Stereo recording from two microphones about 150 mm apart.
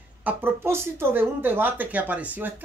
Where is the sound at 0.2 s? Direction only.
10° right (ahead or behind).